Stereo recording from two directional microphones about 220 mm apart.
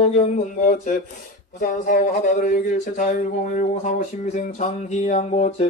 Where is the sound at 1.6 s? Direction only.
40° left (ahead or behind).